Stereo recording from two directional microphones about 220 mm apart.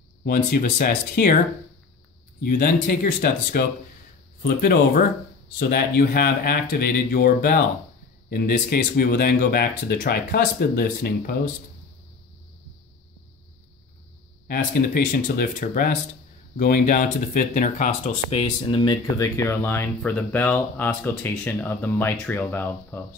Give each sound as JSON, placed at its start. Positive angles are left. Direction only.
{"t": 0.2, "sound": "speech", "side_deg": 40}
{"t": 2.4, "sound": "speech", "side_deg": 40}
{"t": 14.5, "sound": "speech", "side_deg": 40}
{"t": 18.3, "sound": "speech", "side_deg": 25}